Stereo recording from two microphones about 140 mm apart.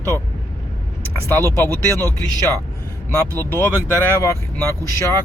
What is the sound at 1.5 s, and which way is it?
Speech, 15° left (ahead or behind).